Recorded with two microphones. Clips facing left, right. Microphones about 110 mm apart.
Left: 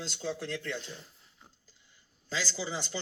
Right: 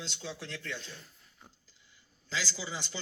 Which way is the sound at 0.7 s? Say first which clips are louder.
Left 4 dB; 20° left (ahead or behind).